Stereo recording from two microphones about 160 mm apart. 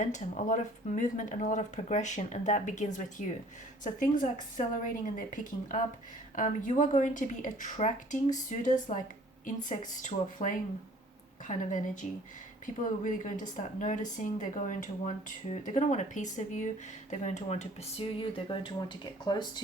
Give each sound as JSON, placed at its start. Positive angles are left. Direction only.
{"t": 0.0, "sound": "a woman's voice", "side_deg": 50}